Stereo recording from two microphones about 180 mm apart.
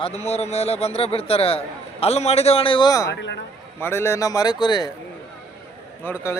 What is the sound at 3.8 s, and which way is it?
Speech, 15° left (ahead or behind).